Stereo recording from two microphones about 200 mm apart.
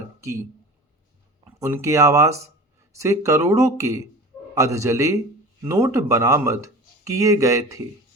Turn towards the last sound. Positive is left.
turn(degrees=-15)  # may be behind; listen again after turning